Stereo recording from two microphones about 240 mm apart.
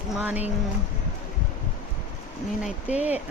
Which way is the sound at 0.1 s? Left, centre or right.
Centre.